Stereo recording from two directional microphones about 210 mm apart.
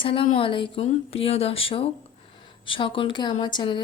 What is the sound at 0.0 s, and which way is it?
Speech, 25° left (ahead or behind).